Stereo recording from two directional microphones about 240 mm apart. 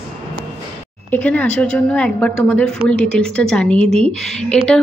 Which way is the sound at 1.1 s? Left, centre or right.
Centre.